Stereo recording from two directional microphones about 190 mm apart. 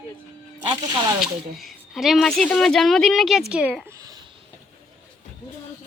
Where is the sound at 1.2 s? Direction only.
Centre (ahead or behind).